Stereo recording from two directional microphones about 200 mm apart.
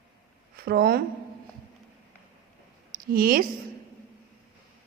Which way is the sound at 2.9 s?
45° right (ahead or behind).